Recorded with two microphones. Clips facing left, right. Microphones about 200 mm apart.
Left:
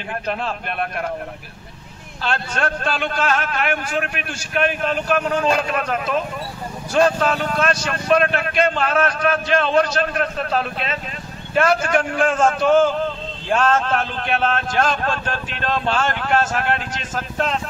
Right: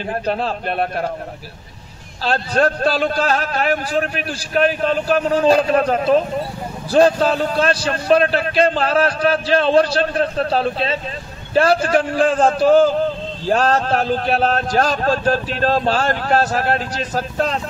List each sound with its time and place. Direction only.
0.3 s a man's voice: 35° right (ahead or behind)
2.2 s a man's voice: 35° right (ahead or behind)